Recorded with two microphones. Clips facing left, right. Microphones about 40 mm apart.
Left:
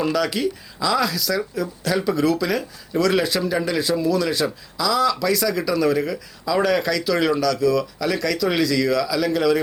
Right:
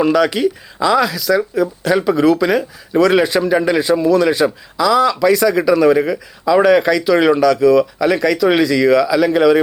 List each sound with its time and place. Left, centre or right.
0.0 s speech: right